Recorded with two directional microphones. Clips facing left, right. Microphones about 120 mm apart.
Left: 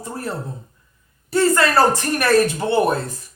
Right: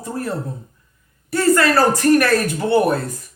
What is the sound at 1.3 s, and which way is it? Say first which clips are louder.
Speech: right 1 dB; 25° left (ahead or behind).